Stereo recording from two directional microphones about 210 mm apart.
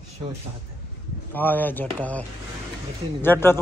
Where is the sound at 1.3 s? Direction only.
10° left (ahead or behind).